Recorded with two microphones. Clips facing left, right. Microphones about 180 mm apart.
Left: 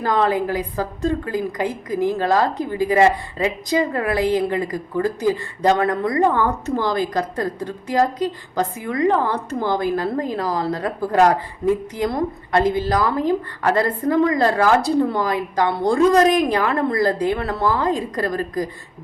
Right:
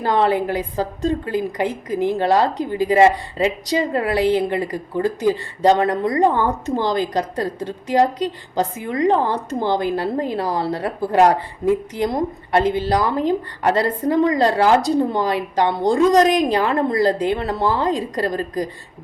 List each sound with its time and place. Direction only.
0.0 s a woman's voice: 25° right (ahead or behind)